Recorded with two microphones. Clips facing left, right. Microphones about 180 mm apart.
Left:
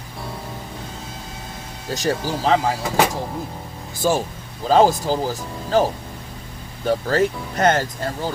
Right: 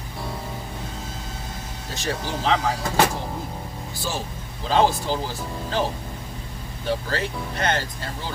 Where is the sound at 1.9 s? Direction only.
40° left (ahead or behind).